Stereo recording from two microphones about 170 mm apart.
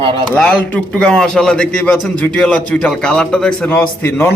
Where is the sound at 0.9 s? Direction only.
5° left (ahead or behind).